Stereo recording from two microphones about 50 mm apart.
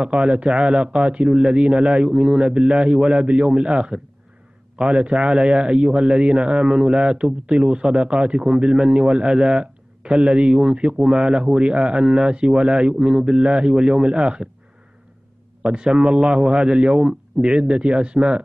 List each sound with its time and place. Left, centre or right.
0.0 s a man's voice: centre
15.6 s a man's voice: right
15.9 s a man's voice: centre